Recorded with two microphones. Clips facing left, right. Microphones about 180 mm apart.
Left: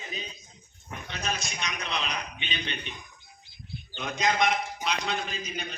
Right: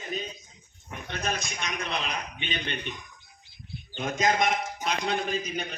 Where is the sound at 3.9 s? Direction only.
45° right (ahead or behind).